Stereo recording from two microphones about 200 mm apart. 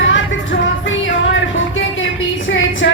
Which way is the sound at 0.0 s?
70° left (ahead or behind).